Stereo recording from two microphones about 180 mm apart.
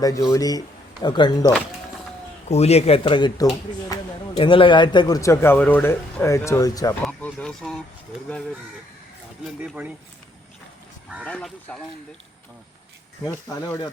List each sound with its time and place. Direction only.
0.3 s speech: 20° left (ahead or behind)
2.5 s speech: 35° left (ahead or behind); by 6.9 s 20° left (ahead or behind)
7.0 s speech: 10° left (ahead or behind)
9.6 s speech: 10° right (ahead or behind)
11.2 s speech: 5° left (ahead or behind)
13.2 s speech: 20° left (ahead or behind)